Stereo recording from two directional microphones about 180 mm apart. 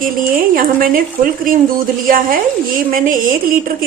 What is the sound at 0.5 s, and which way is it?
A woman's voice, 50° right (ahead or behind).